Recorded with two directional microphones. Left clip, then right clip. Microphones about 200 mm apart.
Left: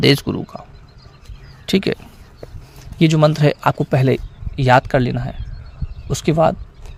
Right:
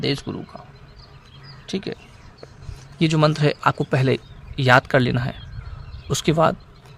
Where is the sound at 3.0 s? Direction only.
20° left (ahead or behind).